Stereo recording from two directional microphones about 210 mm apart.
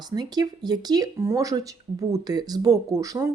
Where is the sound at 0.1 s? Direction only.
20° right (ahead or behind).